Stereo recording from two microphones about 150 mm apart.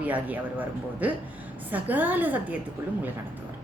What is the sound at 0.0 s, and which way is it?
A woman's voice, 10° right (ahead or behind).